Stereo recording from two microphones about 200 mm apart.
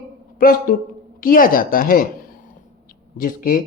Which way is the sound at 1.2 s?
45° left (ahead or behind).